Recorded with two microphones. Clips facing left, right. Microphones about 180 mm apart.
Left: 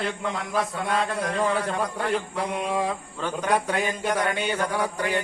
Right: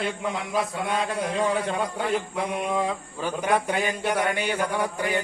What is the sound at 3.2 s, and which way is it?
A man's voice, 10° right (ahead or behind).